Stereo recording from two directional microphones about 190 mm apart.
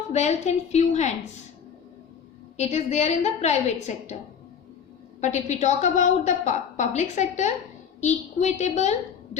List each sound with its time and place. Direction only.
0.1 s a woman's voice: 35° left (ahead or behind)
2.6 s a woman's voice: 35° left (ahead or behind)
5.2 s a woman's voice: 40° left (ahead or behind)